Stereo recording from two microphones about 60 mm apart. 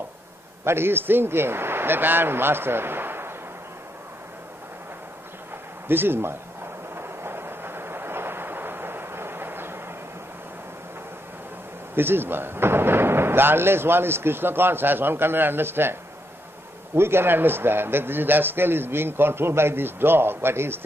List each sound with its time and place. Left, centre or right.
0.7 s a man's voice: right
5.9 s a sound: right
11.9 s speech: right